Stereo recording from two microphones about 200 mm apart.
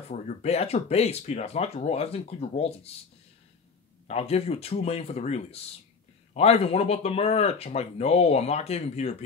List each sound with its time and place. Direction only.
0.1 s speech: 35° left (ahead or behind)
4.1 s speech: 30° left (ahead or behind)